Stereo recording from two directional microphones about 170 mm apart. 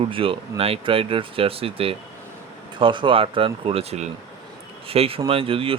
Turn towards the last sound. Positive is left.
turn(degrees=-35)  # may be behind; listen again after turning